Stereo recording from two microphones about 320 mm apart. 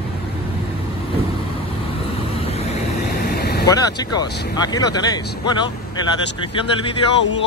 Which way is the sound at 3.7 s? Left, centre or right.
Centre.